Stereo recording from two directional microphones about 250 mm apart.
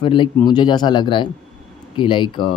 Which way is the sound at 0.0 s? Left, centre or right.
Centre.